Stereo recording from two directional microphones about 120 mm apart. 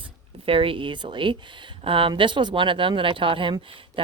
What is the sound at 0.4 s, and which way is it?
Speech, 50° right (ahead or behind).